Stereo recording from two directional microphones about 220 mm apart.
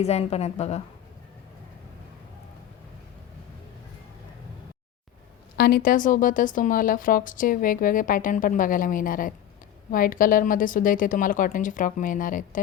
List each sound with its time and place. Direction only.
0.0 s a woman's voice: 30° left (ahead or behind)
5.5 s speech: 45° left (ahead or behind)